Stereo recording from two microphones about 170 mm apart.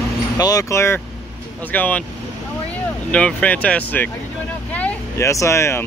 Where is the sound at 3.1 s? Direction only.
5° left (ahead or behind).